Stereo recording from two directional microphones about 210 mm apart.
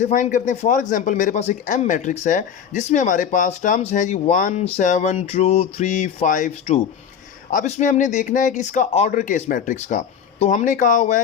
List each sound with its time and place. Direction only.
0.0 s speech: 35° left (ahead or behind)